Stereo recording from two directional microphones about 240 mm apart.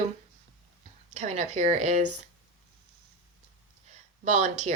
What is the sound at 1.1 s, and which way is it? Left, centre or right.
Speech, right.